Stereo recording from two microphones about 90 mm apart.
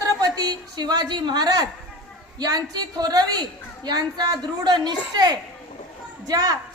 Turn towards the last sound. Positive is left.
turn(degrees=-45)  # may be behind; listen again after turning